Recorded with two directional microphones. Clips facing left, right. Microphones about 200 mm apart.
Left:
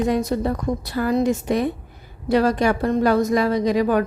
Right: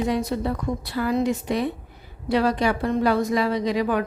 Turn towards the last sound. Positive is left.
turn(degrees=45)  # may be behind; listen again after turning